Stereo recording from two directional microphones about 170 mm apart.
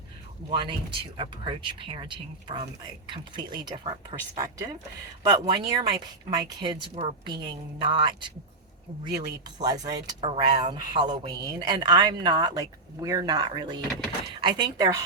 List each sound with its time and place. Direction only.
0.5 s speech: 30° right (ahead or behind)